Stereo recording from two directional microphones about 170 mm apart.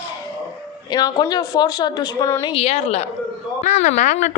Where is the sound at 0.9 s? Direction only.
25° left (ahead or behind).